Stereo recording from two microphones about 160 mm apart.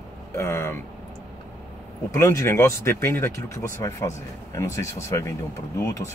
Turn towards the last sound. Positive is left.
turn(degrees=20)  # may be behind; listen again after turning